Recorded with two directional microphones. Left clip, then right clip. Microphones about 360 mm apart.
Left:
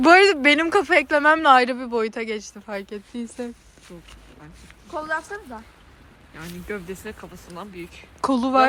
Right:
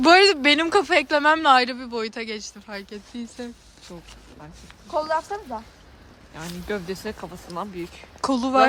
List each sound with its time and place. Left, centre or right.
0.0 s a woman's voice: centre
4.9 s speech: right
6.7 s speech: right
8.2 s a woman's voice: centre